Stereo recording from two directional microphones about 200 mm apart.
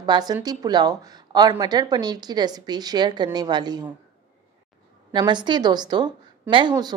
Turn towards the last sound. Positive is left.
turn(degrees=-20)  # may be behind; listen again after turning